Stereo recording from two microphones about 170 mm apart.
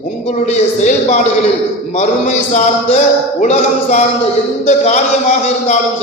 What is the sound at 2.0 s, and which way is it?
A man's voice, 45° left (ahead or behind).